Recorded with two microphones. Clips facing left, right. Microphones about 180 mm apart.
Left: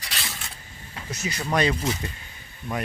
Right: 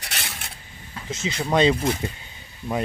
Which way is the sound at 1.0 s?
25° right (ahead or behind).